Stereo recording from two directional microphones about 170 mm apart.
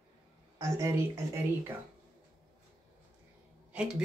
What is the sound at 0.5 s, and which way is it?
Speech, 15° right (ahead or behind).